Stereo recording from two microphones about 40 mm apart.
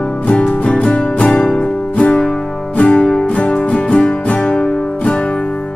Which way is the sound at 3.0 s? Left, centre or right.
Left.